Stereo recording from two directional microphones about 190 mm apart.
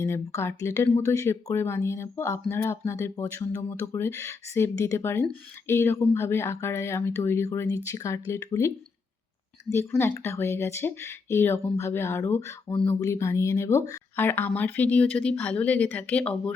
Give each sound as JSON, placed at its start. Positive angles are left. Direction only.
{"t": 0.0, "sound": "speech", "side_deg": 15}